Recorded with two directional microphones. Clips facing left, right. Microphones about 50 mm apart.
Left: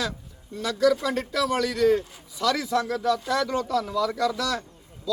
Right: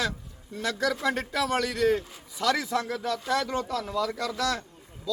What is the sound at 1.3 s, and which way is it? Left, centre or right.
A man's voice, right.